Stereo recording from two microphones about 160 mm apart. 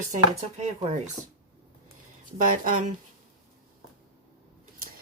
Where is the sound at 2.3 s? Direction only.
55° right (ahead or behind).